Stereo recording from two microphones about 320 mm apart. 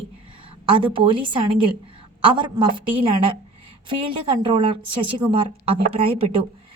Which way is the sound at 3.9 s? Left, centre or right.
Centre.